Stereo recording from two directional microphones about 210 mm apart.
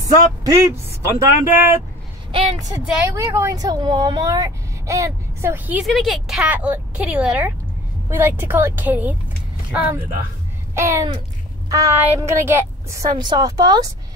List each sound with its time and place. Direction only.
0.4 s speech: 15° right (ahead or behind)
2.3 s a woman's voice: 30° right (ahead or behind)
3.2 s speech: 15° right (ahead or behind)
5.9 s speech: centre (ahead or behind); by 13.8 s 20° right (ahead or behind)